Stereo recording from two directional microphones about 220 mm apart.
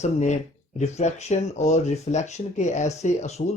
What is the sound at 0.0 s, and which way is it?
Speech, 30° left (ahead or behind).